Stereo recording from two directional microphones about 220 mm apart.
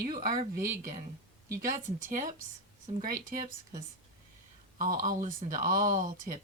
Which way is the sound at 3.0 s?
40° right (ahead or behind).